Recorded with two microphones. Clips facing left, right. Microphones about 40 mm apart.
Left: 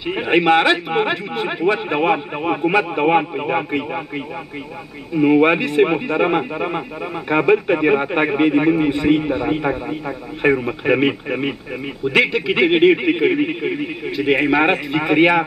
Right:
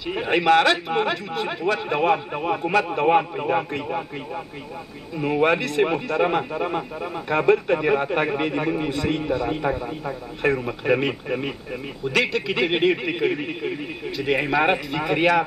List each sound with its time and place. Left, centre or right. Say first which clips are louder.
0.0 s a man's voice: left 5 dB; left
5.1 s a man's voice: left 7 dB; left